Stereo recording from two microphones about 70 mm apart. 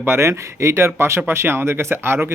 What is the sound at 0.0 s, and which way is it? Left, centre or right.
Speech, right.